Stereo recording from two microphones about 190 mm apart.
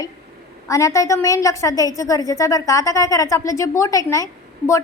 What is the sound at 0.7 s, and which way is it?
A woman's voice, 15° left (ahead or behind).